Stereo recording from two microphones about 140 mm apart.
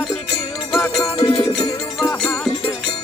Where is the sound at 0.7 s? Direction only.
Centre (ahead or behind).